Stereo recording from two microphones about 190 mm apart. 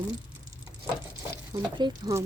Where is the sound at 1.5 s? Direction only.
20° right (ahead or behind).